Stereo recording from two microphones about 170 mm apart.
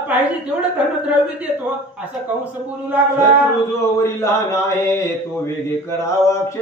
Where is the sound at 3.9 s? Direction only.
15° left (ahead or behind).